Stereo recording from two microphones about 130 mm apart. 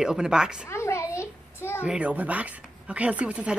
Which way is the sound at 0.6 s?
20° left (ahead or behind).